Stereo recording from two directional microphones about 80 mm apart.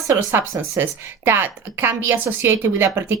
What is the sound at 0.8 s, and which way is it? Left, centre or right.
A woman's voice, right.